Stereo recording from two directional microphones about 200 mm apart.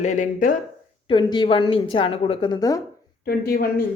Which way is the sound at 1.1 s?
20° left (ahead or behind).